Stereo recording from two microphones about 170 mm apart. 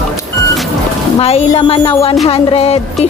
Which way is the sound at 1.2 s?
35° left (ahead or behind).